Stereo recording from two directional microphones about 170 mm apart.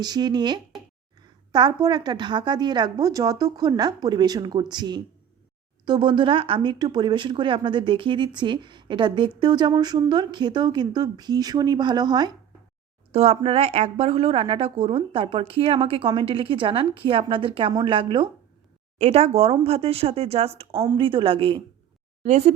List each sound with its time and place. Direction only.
0.0 s speech: 25° right (ahead or behind)
13.1 s a woman's voice: 35° right (ahead or behind)
18.9 s a woman's voice: 40° right (ahead or behind)
20.8 s a woman's voice: 25° right (ahead or behind)